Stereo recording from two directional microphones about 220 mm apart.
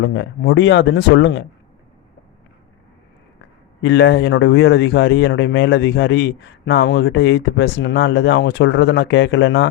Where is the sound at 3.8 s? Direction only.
50° left (ahead or behind).